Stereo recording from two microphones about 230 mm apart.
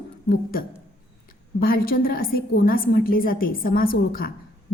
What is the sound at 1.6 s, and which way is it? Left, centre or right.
A woman's voice, left.